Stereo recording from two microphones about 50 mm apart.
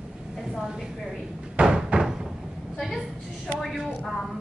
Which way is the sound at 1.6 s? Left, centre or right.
Centre.